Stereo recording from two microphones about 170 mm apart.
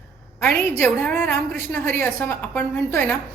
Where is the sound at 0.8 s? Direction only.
10° left (ahead or behind).